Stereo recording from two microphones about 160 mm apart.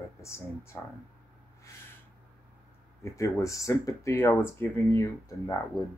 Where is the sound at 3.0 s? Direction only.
20° left (ahead or behind).